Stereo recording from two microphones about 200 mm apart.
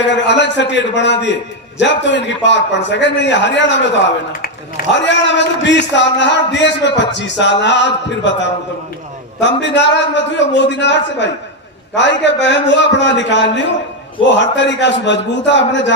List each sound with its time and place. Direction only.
0.0 s a man's voice: 60° left (ahead or behind)
4.9 s a man's voice: 60° left (ahead or behind)